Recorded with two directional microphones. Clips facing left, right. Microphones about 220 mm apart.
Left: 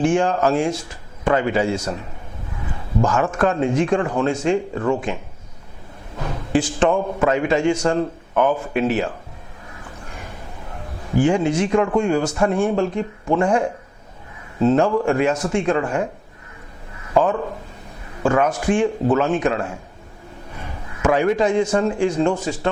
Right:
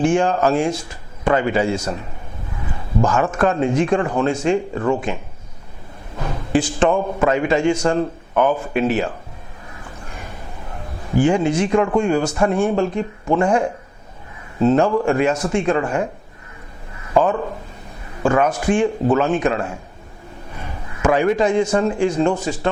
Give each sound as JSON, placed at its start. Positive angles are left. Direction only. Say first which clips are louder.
{"t": 0.0, "sound": "speech", "louder": "right 1 dB", "side_deg": -10}
{"t": 3.1, "sound": "speech", "louder": "right 1 dB", "side_deg": -20}
{"t": 4.4, "sound": "speech", "louder": "right 1 dB", "side_deg": -10}
{"t": 6.1, "sound": "a sound", "louder": "right 1 dB", "side_deg": -25}
{"t": 6.7, "sound": "speech", "louder": "right 1 dB", "side_deg": -20}
{"t": 11.2, "sound": "speech", "louder": "right 1 dB", "side_deg": -15}
{"t": 17.2, "sound": "speech", "louder": "right 1 dB", "side_deg": -20}
{"t": 20.6, "sound": "a sound", "louder": "right 1 dB", "side_deg": -15}
{"t": 21.7, "sound": "speech", "louder": "right 1 dB", "side_deg": -15}
{"t": 22.4, "sound": "speech", "louder": "right 1 dB", "side_deg": -10}